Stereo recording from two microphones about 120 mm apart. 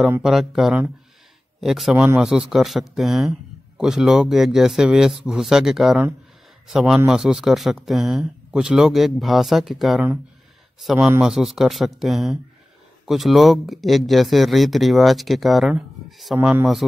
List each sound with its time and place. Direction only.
0.2 s speech: 5° right (ahead or behind)
16.3 s speech: 15° right (ahead or behind)